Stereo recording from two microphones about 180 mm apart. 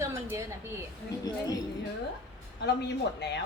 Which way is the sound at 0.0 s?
15° right (ahead or behind).